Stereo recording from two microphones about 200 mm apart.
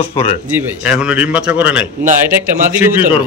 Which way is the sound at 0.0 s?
30° left (ahead or behind).